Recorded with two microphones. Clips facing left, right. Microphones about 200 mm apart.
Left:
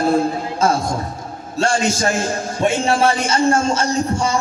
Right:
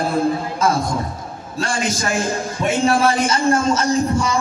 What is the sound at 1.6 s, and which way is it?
A man's voice, 25° left (ahead or behind).